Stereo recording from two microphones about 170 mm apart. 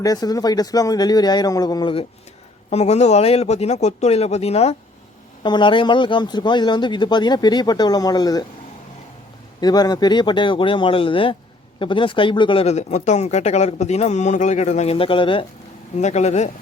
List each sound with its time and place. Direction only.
0.0 s speech: 20° left (ahead or behind)
2.6 s speech: 40° left (ahead or behind)
5.4 s speech: 25° left (ahead or behind)
9.6 s speech: 25° left (ahead or behind)
16.0 s speech: 40° left (ahead or behind)